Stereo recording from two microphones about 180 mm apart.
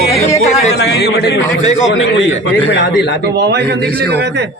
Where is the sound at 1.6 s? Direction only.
40° left (ahead or behind).